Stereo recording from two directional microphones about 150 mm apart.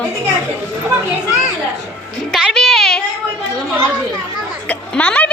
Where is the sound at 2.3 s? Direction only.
Centre (ahead or behind).